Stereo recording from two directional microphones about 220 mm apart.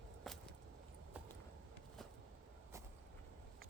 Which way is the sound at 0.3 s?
Centre (ahead or behind).